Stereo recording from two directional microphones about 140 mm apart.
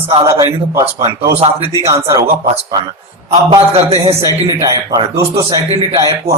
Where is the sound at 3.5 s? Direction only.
40° right (ahead or behind).